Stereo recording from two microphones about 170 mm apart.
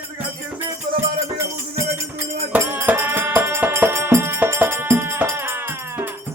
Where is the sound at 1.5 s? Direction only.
15° right (ahead or behind).